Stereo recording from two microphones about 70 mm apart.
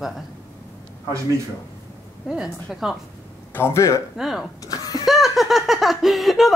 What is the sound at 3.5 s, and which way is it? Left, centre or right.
Speech, left.